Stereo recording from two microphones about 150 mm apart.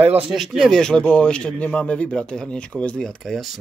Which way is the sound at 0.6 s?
5° left (ahead or behind).